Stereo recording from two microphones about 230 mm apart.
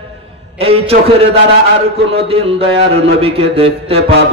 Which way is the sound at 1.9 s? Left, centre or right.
Right.